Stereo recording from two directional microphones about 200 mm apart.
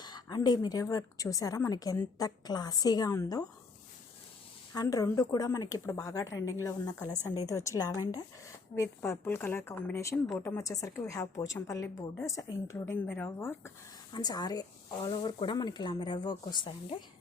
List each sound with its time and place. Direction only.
0.0 s a woman's voice: 20° left (ahead or behind)
4.7 s a woman's voice: 20° left (ahead or behind)